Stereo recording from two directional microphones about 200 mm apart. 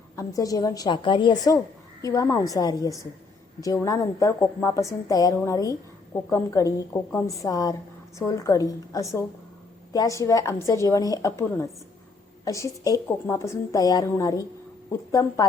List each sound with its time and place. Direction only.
0.2 s a woman's voice: 15° left (ahead or behind)